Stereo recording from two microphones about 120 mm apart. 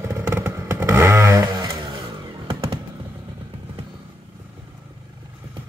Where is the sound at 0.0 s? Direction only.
20° right (ahead or behind).